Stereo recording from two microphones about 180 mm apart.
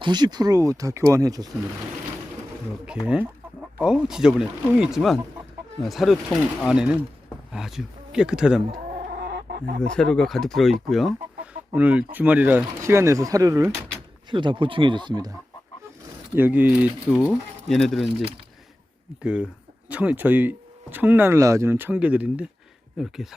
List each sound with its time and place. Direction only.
0.0 s speech: 25° right (ahead or behind)
3.0 s speech: 20° left (ahead or behind)
3.8 s speech: 5° right (ahead or behind)
9.0 s chicken: 60° right (ahead or behind)
9.8 s speech: 5° left (ahead or behind); by 15.3 s 25° right (ahead or behind)
16.3 s speech: 10° right (ahead or behind)